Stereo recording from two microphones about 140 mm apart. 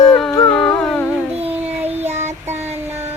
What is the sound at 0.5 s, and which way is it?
Music, 5° left (ahead or behind).